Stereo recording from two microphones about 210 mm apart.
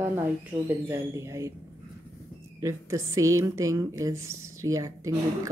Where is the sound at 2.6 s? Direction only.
15° right (ahead or behind).